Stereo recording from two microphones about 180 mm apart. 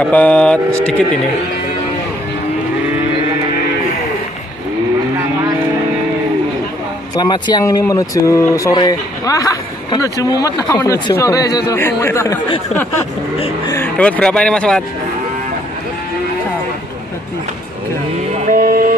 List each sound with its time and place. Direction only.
0.0 s speech: 5° left (ahead or behind)
7.2 s speech: 25° left (ahead or behind)
13.7 s speech: 10° left (ahead or behind)
18.5 s music: 55° right (ahead or behind)